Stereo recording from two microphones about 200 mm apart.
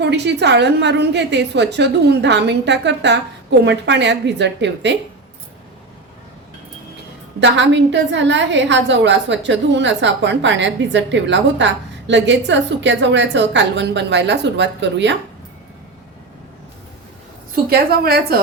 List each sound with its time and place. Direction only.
0.0 s a woman's voice: 60° right (ahead or behind)
7.3 s a woman's voice: 65° right (ahead or behind)
17.5 s a woman's voice: 50° right (ahead or behind)